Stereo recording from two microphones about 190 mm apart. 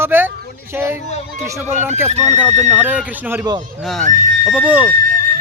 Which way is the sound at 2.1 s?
35° right (ahead or behind).